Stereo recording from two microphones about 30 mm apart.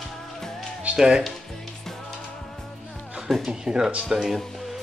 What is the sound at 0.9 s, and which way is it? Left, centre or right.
Speech, right.